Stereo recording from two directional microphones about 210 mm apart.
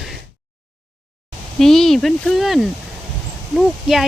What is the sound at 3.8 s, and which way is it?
Speech, centre (ahead or behind).